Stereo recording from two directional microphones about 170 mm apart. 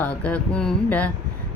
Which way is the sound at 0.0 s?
10° left (ahead or behind).